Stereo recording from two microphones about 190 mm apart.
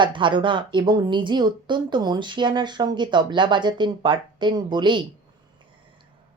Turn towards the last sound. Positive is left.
turn(degrees=-25)  # may be behind; listen again after turning